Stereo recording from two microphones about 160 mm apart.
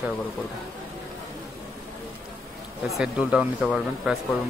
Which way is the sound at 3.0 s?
5° right (ahead or behind).